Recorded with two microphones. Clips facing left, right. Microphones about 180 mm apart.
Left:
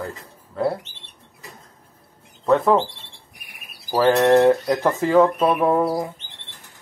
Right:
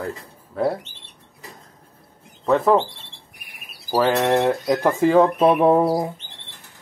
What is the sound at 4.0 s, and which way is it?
Speech, 5° right (ahead or behind).